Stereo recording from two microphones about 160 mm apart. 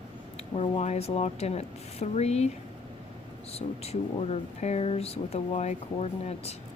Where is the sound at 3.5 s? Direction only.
40° left (ahead or behind).